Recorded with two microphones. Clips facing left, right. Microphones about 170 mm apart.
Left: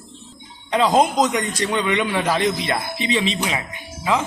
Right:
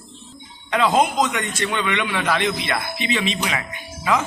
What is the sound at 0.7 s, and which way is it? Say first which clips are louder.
A man's voice: left 2 dB; 35° left (ahead or behind).